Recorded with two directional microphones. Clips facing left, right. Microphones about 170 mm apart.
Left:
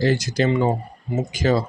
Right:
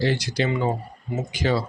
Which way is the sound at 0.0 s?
45° left (ahead or behind).